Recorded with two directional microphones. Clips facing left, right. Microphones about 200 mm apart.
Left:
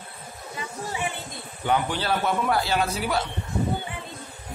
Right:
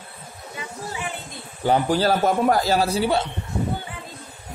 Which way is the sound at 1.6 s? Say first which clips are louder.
Right 6 dB; 35° right (ahead or behind).